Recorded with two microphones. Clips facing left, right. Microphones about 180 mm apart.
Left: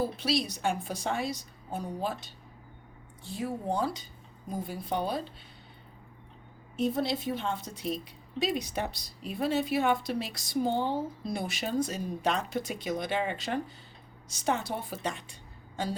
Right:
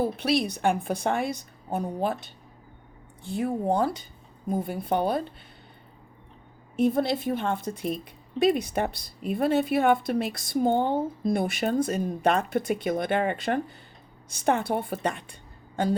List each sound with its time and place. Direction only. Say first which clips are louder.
0.0 s a woman's voice: right 5 dB; 60° right (ahead or behind)
6.7 s a woman's voice: right 6 dB; 55° right (ahead or behind)